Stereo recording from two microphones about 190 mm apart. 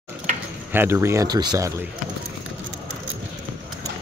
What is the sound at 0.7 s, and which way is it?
Speech, 10° right (ahead or behind).